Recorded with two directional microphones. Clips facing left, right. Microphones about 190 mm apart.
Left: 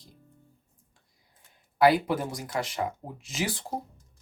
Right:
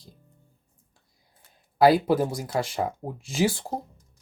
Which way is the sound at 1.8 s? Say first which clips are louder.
Right 4 dB; 35° right (ahead or behind).